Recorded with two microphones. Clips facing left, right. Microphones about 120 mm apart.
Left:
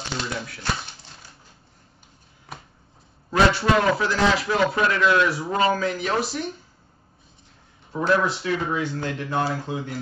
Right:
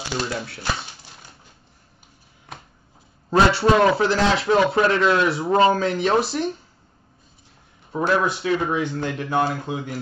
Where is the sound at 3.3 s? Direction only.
30° right (ahead or behind).